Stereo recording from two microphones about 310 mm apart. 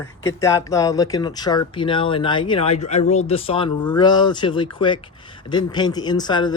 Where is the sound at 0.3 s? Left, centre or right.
Centre.